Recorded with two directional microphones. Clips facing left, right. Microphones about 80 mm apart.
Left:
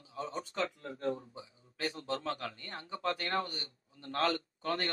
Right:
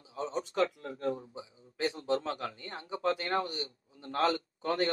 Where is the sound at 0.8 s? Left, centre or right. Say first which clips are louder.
Right 2 dB; right.